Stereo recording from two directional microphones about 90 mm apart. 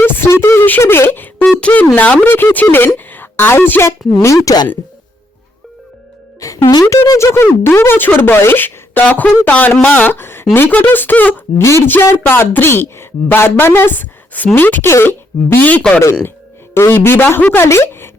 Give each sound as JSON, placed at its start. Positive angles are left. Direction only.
{"t": 0.0, "sound": "a woman's voice", "side_deg": 25}
{"t": 6.4, "sound": "speech", "side_deg": 45}
{"t": 6.9, "sound": "a woman's voice", "side_deg": 35}